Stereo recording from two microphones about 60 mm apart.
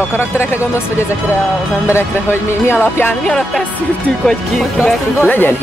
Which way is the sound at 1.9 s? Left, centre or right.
Left.